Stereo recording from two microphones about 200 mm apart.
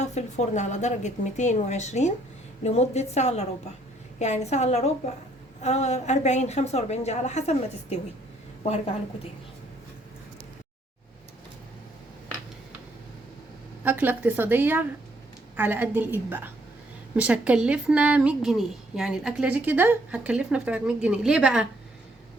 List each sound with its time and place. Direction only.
0.0 s a woman's voice: 35° left (ahead or behind)
13.8 s a woman's voice: 10° right (ahead or behind)